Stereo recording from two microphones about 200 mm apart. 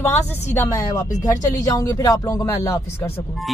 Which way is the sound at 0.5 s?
15° left (ahead or behind).